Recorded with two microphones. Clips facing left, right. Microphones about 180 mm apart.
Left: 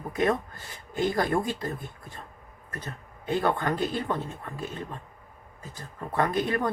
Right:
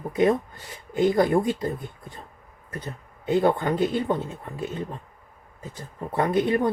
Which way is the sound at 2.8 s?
25° right (ahead or behind).